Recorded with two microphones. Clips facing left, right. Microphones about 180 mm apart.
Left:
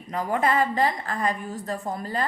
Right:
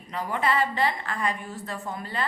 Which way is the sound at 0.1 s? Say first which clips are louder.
Left 3 dB; 45° left (ahead or behind).